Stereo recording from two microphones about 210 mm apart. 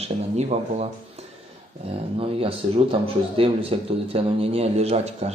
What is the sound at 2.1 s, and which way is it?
A man's voice, 25° right (ahead or behind).